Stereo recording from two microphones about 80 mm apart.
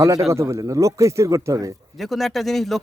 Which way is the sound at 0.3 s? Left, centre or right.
Right.